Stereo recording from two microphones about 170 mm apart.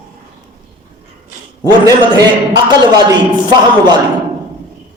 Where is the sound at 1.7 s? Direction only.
25° right (ahead or behind).